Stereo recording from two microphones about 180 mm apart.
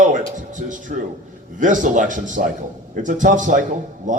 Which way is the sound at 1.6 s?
45° right (ahead or behind).